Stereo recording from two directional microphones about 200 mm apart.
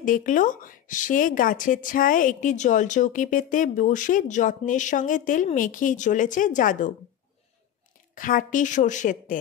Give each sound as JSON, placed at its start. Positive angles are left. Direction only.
{"t": 0.0, "sound": "speech", "side_deg": 40}
{"t": 8.1, "sound": "speech", "side_deg": 40}